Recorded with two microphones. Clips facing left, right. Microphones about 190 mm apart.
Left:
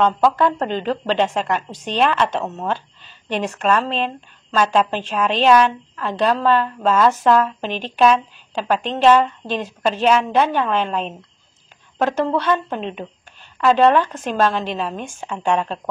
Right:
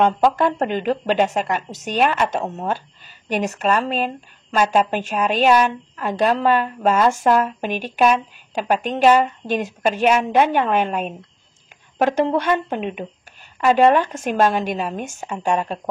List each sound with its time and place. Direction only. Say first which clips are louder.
0.4 s a woman's voice: even; 10° right (ahead or behind)